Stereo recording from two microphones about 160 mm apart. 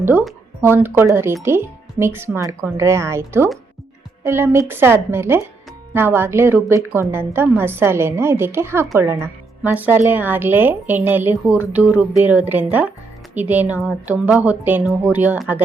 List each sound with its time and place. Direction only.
0.0 s a woman's voice: 10° right (ahead or behind)